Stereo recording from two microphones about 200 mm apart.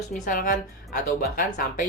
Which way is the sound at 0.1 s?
40° left (ahead or behind).